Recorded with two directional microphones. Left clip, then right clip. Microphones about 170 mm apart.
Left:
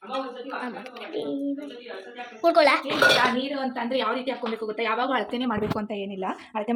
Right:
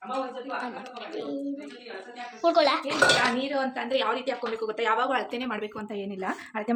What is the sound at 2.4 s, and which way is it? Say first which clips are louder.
Speech: left 3 dB; 10° left (ahead or behind).